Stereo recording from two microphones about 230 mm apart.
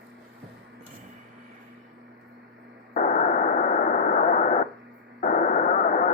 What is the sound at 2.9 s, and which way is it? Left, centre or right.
Radio, left.